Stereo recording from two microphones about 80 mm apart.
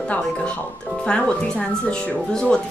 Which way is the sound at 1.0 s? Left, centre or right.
Centre.